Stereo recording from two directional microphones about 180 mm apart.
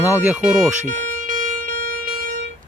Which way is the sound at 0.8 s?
45° right (ahead or behind).